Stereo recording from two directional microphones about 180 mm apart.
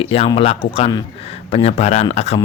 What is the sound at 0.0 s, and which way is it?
Speech, 30° left (ahead or behind).